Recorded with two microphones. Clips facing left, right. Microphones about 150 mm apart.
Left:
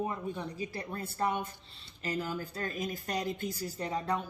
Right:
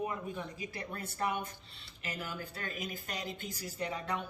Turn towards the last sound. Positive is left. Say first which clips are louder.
# left 4 dB
turn(degrees=35)  # may be behind; listen again after turning